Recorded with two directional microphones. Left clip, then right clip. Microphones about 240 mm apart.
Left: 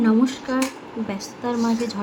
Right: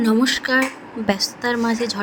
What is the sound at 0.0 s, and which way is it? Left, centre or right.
A woman's voice, right.